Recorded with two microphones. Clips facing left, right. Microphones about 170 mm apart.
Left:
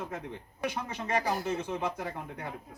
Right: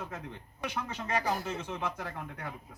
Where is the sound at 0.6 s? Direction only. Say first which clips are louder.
Left 2 dB; 15° left (ahead or behind).